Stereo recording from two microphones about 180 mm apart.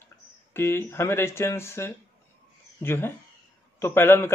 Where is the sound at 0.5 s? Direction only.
15° left (ahead or behind).